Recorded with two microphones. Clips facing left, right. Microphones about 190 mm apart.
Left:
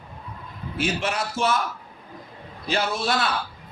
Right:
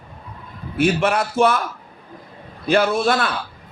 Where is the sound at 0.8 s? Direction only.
55° right (ahead or behind).